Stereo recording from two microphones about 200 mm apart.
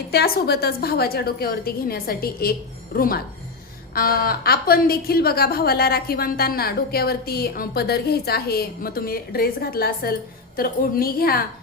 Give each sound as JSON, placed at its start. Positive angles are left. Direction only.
{"t": 0.1, "sound": "a woman's voice", "side_deg": 50}